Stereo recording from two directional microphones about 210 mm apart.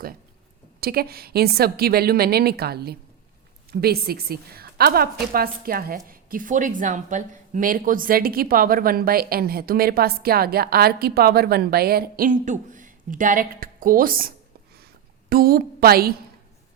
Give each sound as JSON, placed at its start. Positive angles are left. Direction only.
{"t": 0.8, "sound": "speech", "side_deg": -45}